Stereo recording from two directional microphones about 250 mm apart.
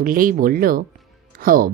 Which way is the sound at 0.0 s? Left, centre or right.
Right.